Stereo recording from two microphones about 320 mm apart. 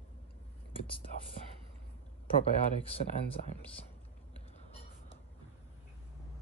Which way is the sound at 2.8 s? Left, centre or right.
Centre.